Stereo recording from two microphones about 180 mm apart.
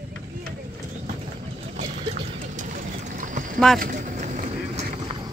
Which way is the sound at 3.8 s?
45° right (ahead or behind).